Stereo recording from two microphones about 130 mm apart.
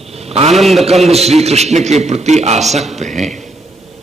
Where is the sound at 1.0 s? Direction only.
55° right (ahead or behind).